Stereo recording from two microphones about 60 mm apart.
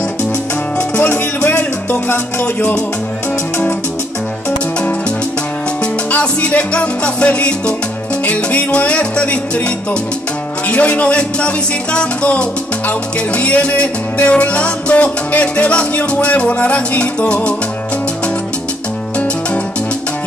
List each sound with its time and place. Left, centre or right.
0.7 s music: left
6.0 s music: left
10.7 s music: left